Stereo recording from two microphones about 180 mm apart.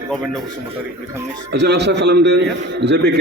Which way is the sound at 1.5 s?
65° right (ahead or behind).